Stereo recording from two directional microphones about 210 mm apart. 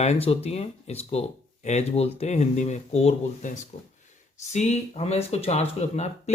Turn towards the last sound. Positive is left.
turn(degrees=30)  # may be behind; listen again after turning